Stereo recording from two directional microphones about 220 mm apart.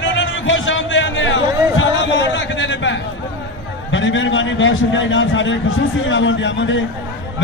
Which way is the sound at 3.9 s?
60° left (ahead or behind).